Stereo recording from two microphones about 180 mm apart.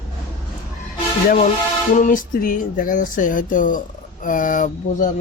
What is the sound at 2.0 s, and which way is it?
Speech, 45° left (ahead or behind).